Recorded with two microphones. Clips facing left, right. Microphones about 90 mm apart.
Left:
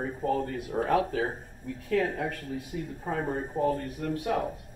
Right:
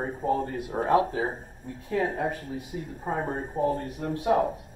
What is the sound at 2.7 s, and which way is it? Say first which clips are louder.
Speech: right 2 dB; 40° right (ahead or behind).